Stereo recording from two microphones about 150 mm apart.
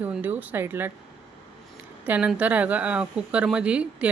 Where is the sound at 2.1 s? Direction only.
10° right (ahead or behind).